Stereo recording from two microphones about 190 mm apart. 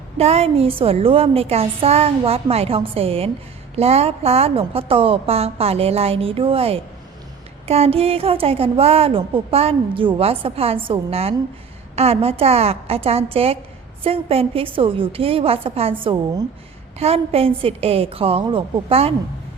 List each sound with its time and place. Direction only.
0.2 s a woman's voice: 35° right (ahead or behind)